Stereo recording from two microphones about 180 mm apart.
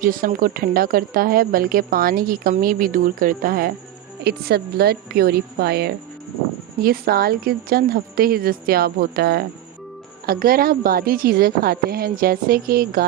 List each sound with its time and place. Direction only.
0.0 s a woman's voice: 50° right (ahead or behind)